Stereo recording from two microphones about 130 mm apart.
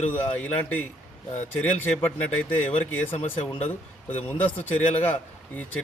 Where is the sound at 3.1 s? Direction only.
50° left (ahead or behind).